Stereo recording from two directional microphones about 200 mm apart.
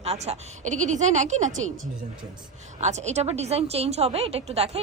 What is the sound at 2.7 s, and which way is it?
A woman's voice, 35° right (ahead or behind).